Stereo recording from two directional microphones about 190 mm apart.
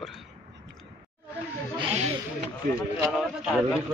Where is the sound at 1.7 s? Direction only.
30° right (ahead or behind).